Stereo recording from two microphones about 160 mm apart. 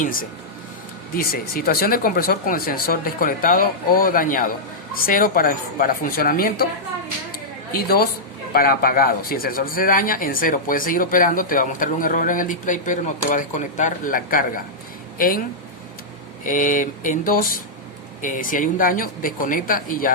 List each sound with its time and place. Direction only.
0.0 s speech: 60° left (ahead or behind)
7.7 s a woman's voice: 70° left (ahead or behind)
16.5 s speech: 55° left (ahead or behind)